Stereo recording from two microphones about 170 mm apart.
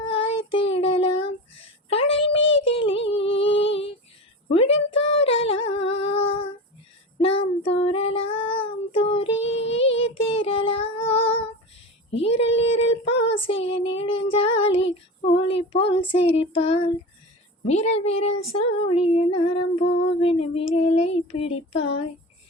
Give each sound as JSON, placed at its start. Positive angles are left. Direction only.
{"t": 0.0, "sound": "child singing", "side_deg": 30}
{"t": 4.5, "sound": "a sound", "side_deg": 35}
{"t": 6.0, "sound": "female singing", "side_deg": 35}
{"t": 7.2, "sound": "child singing", "side_deg": 35}
{"t": 17.7, "sound": "female singing", "side_deg": 40}
{"t": 20.1, "sound": "child singing", "side_deg": 35}